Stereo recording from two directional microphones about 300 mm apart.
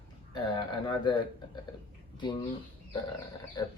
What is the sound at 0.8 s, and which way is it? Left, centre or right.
Speech, centre.